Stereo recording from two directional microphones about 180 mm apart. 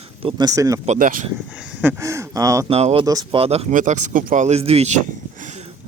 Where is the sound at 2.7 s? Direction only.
35° right (ahead or behind).